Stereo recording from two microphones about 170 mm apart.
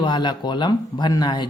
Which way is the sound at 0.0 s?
25° left (ahead or behind).